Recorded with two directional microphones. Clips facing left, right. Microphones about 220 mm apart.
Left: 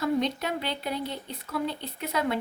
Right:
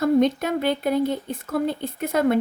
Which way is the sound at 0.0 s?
50° right (ahead or behind).